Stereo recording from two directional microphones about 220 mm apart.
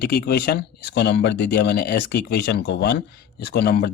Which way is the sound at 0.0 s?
45° left (ahead or behind).